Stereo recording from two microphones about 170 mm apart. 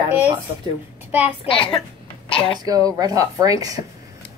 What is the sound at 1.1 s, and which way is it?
Speech, 10° right (ahead or behind).